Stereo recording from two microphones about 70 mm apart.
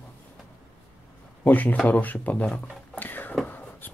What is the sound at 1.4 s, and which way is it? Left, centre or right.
A man's voice, left.